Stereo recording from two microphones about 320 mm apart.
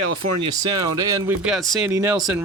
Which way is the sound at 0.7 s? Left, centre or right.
Centre.